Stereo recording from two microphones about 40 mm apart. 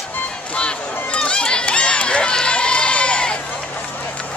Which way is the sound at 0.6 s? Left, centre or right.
Left.